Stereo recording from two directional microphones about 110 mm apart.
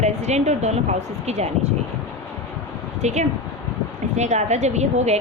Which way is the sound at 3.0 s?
90° right.